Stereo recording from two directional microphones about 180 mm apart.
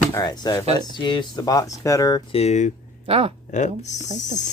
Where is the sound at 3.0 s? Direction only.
30° right (ahead or behind).